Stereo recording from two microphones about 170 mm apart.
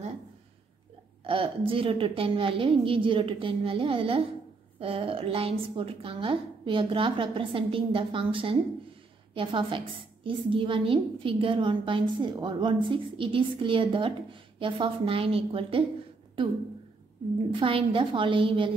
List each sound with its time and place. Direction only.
1.2 s a woman's voice: 30° right (ahead or behind)
17.6 s a woman's voice: 30° right (ahead or behind)